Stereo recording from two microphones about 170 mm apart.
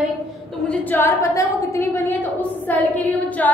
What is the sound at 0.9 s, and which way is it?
A woman's voice, 15° left (ahead or behind).